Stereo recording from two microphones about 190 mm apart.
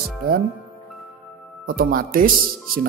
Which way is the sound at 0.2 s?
50° right (ahead or behind).